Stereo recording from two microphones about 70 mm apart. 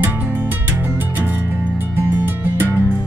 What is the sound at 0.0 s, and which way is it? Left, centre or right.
Music, right.